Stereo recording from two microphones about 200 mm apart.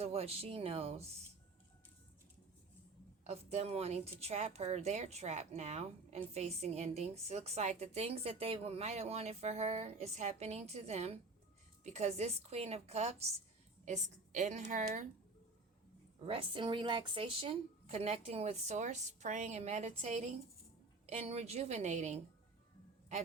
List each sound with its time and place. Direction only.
0.0 s a woman's voice: 30° right (ahead or behind)
3.2 s a woman's voice: 30° right (ahead or behind)
16.2 s a woman's voice: 25° right (ahead or behind)